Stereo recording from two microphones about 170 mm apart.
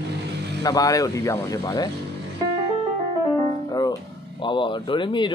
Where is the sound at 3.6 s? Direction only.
25° left (ahead or behind).